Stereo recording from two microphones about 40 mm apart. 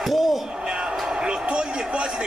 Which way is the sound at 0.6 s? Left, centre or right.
Right.